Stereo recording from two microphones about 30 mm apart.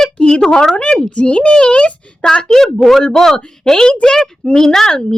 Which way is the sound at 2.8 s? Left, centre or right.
Centre.